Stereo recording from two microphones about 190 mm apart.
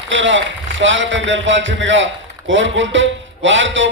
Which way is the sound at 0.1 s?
75° right (ahead or behind).